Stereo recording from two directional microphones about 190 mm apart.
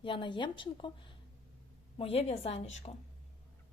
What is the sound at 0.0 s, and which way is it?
A woman's voice, 25° left (ahead or behind).